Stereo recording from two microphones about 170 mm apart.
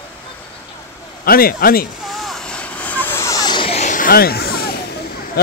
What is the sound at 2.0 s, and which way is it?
Vehicle, centre (ahead or behind).